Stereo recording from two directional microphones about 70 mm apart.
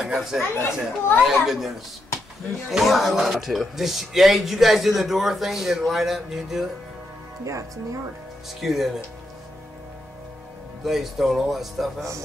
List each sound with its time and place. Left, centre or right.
0.0 s speech: centre
0.6 s a child's voice: left
1.2 s speech: centre
2.7 s speech: centre
7.4 s speech: right
8.5 s speech: centre
10.8 s speech: centre